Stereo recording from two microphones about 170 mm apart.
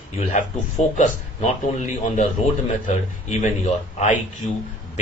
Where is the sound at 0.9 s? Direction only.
45° left (ahead or behind).